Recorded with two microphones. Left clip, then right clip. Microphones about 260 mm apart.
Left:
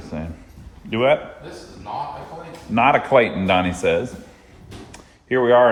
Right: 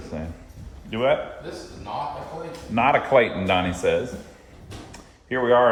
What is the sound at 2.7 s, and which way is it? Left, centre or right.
A man's voice, centre.